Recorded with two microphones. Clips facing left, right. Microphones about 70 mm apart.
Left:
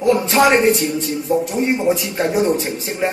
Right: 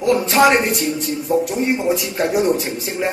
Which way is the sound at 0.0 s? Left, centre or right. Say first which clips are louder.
Even; left.